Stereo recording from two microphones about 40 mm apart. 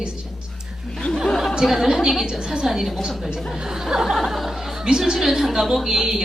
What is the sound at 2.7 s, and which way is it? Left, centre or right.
A woman's voice, centre.